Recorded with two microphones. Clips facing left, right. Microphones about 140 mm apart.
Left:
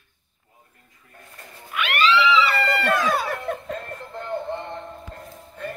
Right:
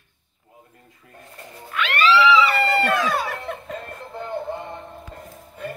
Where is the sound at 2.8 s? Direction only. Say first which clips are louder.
Even; centre (ahead or behind).